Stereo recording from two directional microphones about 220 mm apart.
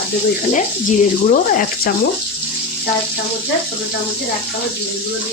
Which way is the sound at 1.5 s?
40° left (ahead or behind).